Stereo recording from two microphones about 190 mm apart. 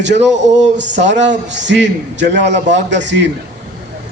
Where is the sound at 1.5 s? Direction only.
70° right (ahead or behind).